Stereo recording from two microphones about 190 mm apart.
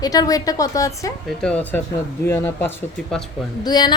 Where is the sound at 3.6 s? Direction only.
20° left (ahead or behind).